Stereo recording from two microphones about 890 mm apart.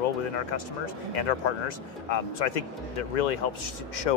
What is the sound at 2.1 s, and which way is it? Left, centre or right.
Speech, left.